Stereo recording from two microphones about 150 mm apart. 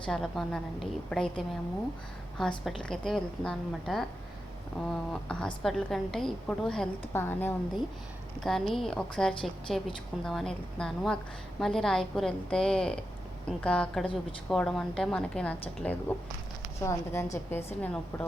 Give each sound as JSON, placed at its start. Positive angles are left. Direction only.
{"t": 0.0, "sound": "a woman's voice", "side_deg": 5}
{"t": 2.6, "sound": "a woman's voice", "side_deg": 5}
{"t": 7.1, "sound": "a woman's voice", "side_deg": 15}
{"t": 8.4, "sound": "a woman's voice", "side_deg": 0}